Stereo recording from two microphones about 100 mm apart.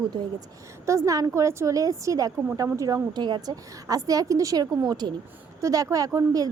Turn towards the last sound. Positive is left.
turn(degrees=-35)  # may be behind; listen again after turning